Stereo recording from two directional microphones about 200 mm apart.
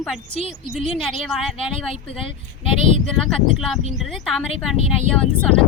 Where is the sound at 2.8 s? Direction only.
35° right (ahead or behind).